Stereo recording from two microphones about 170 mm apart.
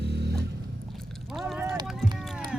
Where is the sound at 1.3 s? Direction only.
Centre (ahead or behind).